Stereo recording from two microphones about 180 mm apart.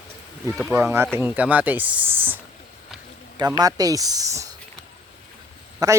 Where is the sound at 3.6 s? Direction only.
20° right (ahead or behind).